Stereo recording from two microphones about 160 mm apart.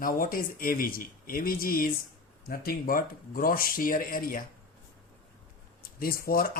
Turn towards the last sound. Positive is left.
turn(degrees=65)  # may be behind; listen again after turning